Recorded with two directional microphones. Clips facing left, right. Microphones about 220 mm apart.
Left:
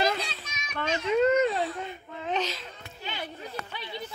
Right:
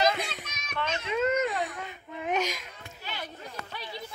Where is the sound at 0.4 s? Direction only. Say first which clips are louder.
Right 1 dB; 60° right (ahead or behind).